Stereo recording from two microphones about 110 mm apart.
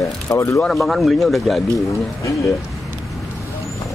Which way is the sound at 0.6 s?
Centre (ahead or behind).